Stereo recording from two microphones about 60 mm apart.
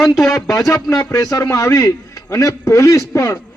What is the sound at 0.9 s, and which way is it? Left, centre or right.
Speech, left.